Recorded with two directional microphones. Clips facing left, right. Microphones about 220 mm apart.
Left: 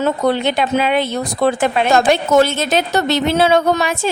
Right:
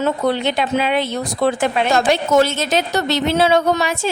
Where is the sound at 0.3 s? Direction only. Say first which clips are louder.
Left 2 dB; 50° left (ahead or behind).